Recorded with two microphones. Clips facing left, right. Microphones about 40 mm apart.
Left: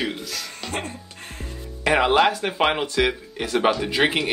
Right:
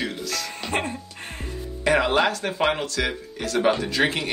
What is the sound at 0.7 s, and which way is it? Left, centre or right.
Music, right.